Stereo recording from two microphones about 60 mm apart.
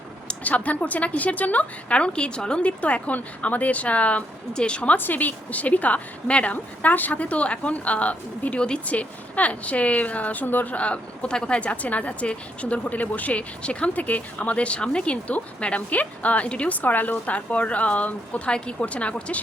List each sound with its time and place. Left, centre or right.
0.3 s a woman's voice: left
4.9 s a woman's voice: left